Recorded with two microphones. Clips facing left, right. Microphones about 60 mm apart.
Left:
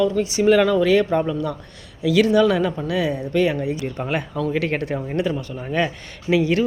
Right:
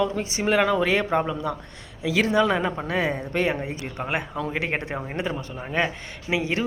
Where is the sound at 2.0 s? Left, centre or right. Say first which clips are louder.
Left 5 dB; right.